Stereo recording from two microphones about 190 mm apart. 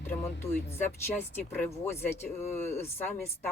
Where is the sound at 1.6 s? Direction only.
10° left (ahead or behind).